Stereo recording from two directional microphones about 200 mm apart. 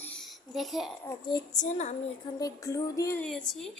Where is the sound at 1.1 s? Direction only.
20° left (ahead or behind).